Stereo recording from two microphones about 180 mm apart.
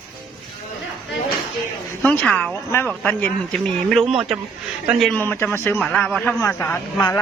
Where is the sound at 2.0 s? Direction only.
5° left (ahead or behind).